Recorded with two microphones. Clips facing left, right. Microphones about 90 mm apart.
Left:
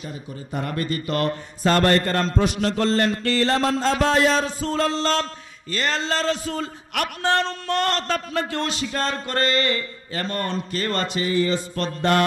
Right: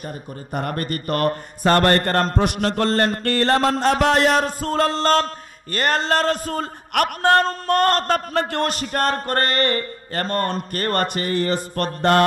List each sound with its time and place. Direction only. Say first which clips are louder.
0.5 s speech: right 1 dB; 55° right (ahead or behind)